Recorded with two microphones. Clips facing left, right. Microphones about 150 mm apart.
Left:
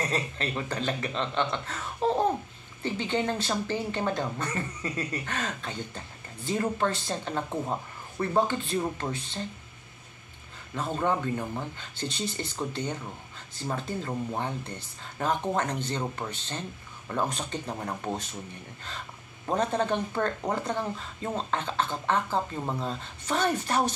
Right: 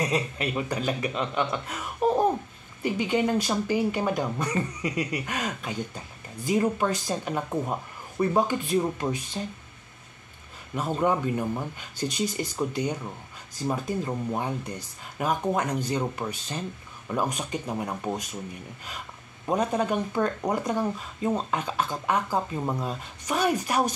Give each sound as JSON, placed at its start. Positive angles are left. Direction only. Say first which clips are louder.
{"t": 0.0, "sound": "speech", "louder": "right 3 dB", "side_deg": -10}
{"t": 10.7, "sound": "speech", "louder": "right 3 dB", "side_deg": -15}
{"t": 12.1, "sound": "speech", "louder": "right 6 dB", "side_deg": 25}
{"t": 12.5, "sound": "speech", "louder": "right 5 dB", "side_deg": -15}
{"t": 19.4, "sound": "speech", "louder": "right 2 dB", "side_deg": -10}